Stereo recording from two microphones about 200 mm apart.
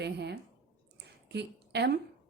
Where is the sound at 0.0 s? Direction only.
55° right (ahead or behind).